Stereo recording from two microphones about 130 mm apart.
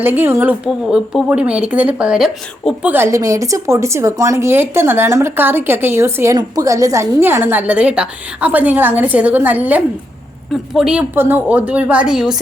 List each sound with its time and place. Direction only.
0.0 s a woman's voice: 15° right (ahead or behind)
2.9 s a woman's voice: 20° right (ahead or behind); by 11.0 s 5° right (ahead or behind)
11.1 s a woman's voice: 15° right (ahead or behind)